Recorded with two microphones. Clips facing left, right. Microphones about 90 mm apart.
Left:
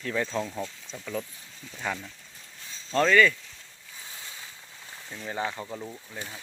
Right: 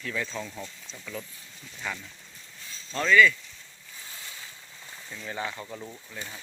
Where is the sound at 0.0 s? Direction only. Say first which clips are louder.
Left 4 dB; 35° left (ahead or behind).